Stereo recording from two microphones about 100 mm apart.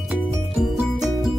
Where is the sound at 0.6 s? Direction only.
5° right (ahead or behind).